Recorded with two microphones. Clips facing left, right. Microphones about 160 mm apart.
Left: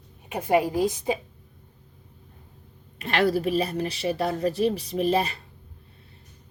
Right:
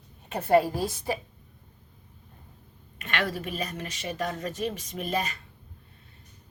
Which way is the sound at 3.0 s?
35° left (ahead or behind).